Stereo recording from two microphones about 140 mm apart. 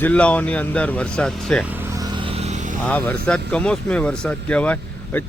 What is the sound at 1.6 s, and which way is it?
Vehicle, 15° right (ahead or behind).